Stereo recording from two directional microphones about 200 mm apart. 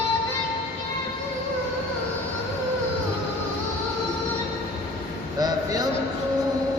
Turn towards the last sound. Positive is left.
turn(degrees=-20)  # may be behind; listen again after turning